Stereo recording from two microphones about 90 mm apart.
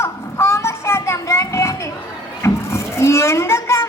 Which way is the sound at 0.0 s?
30° left (ahead or behind).